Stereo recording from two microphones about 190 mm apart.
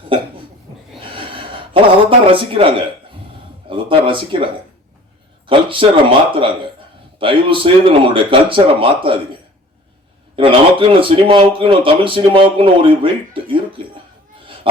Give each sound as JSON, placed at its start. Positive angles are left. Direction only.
{"t": 1.1, "sound": "a sound", "side_deg": -25}
{"t": 3.7, "sound": "speech", "side_deg": -25}
{"t": 5.5, "sound": "speech", "side_deg": -25}
{"t": 10.3, "sound": "speech", "side_deg": -30}